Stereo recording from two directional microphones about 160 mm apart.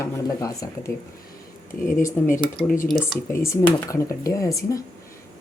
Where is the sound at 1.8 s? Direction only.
55° left (ahead or behind).